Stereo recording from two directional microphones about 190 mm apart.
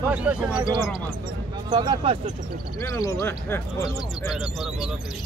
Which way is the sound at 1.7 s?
25° right (ahead or behind).